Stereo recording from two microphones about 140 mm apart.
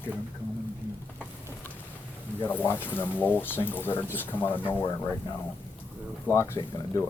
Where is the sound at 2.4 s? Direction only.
15° left (ahead or behind).